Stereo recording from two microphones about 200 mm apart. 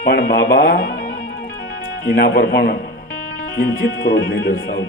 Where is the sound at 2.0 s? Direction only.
50° left (ahead or behind).